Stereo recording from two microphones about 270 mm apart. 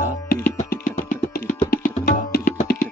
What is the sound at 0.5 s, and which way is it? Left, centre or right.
Music, left.